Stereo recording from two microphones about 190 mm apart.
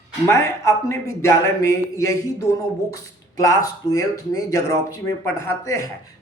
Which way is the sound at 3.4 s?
20° left (ahead or behind).